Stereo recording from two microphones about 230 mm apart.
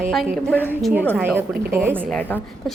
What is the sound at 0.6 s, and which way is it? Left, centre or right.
A woman's voice, centre.